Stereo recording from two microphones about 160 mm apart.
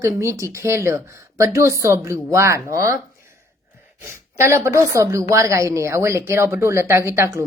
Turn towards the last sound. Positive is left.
turn(degrees=-15)  # may be behind; listen again after turning